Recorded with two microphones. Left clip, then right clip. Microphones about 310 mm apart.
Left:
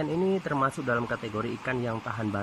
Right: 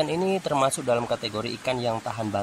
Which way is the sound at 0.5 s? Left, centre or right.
Centre.